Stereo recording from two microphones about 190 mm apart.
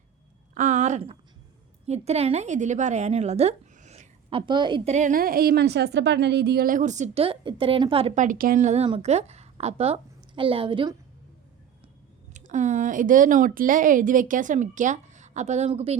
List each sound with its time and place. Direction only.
0.5 s a sound: 40° right (ahead or behind)
1.9 s a woman's voice: 35° right (ahead or behind)
4.9 s a woman's voice: 45° right (ahead or behind); by 10.9 s 25° right (ahead or behind)
12.3 s speech: 40° right (ahead or behind)